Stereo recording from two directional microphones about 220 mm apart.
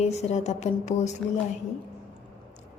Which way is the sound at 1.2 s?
Centre (ahead or behind).